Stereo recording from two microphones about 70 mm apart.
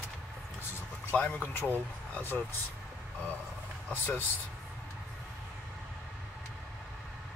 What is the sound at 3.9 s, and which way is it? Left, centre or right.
Speech, left.